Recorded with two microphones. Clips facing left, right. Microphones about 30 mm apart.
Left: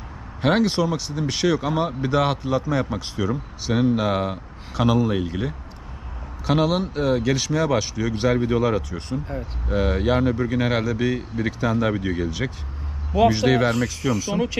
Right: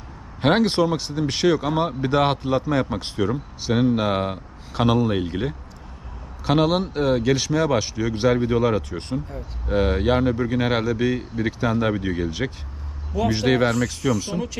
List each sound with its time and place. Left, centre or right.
0.4 s speech: right
1.1 s speech: centre
3.2 s speech: centre
8.9 s speech: right
9.6 s speech: centre
11.9 s speech: centre
13.3 s speech: centre
14.3 s speech: left